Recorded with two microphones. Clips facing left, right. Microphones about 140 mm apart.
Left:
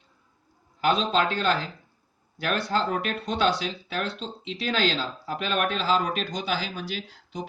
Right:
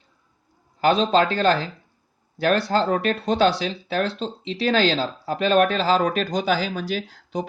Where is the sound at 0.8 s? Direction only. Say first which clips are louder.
Right 5 dB; 35° right (ahead or behind).